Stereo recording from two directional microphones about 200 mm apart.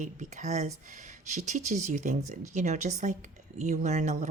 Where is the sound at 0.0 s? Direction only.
40° right (ahead or behind).